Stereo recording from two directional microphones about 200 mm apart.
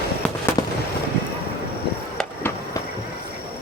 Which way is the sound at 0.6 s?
20° left (ahead or behind).